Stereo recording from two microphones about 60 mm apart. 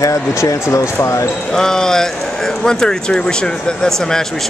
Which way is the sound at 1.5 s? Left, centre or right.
Centre.